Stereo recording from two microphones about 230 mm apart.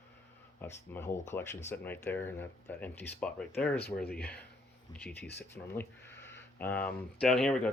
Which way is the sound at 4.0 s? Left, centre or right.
Left.